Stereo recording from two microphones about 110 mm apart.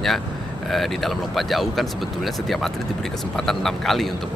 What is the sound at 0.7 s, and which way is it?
Speech, centre (ahead or behind).